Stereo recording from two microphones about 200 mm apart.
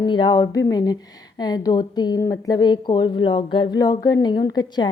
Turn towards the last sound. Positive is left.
turn(degrees=20)  # may be behind; listen again after turning